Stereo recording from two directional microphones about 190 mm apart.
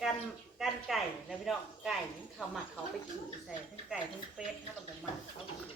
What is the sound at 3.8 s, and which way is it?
Speech, 5° right (ahead or behind).